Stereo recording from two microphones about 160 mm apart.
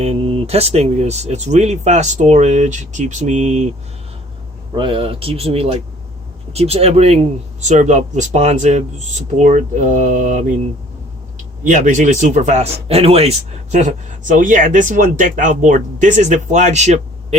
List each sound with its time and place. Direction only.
0.0 s speech: 40° right (ahead or behind)
4.7 s speech: 30° right (ahead or behind); by 10.4 s 50° right (ahead or behind)
11.6 s speech: 50° right (ahead or behind)